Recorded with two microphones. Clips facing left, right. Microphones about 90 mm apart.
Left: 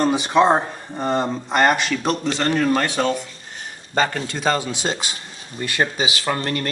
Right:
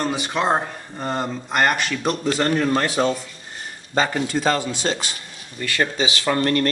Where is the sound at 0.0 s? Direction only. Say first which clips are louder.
Left 6 dB; 25° left (ahead or behind).